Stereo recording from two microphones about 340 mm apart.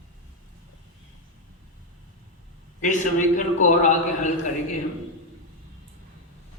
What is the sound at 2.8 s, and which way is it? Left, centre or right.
A man's voice, left.